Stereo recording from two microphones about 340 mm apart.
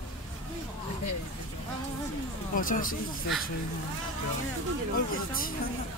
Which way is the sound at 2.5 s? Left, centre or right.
Left.